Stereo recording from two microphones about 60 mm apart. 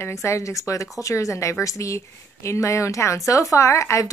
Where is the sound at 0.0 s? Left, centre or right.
Left.